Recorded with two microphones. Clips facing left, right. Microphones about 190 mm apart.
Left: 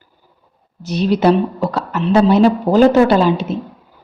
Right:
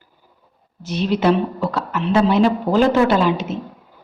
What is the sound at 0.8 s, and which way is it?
A woman's voice, 40° left (ahead or behind).